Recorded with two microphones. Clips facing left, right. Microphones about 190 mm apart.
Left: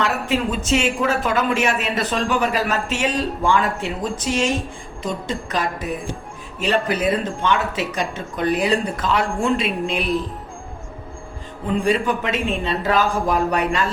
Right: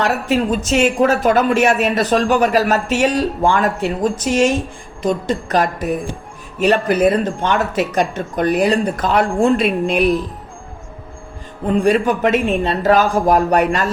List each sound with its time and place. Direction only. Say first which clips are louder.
0.0 s speech: right 4 dB; 45° right (ahead or behind)
11.6 s speech: right 5 dB; 50° right (ahead or behind)